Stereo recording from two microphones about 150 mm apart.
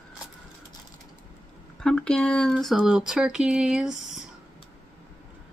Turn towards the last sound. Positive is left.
turn(degrees=-5)  # may be behind; listen again after turning